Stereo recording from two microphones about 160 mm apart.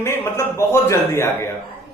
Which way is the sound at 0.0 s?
15° left (ahead or behind).